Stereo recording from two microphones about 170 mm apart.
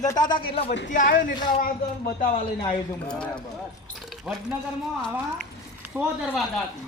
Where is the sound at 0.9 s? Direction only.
50° left (ahead or behind).